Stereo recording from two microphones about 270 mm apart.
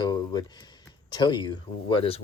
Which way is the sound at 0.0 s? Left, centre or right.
Centre.